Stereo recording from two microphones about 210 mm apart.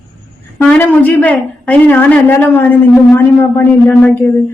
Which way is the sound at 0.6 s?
5° left (ahead or behind).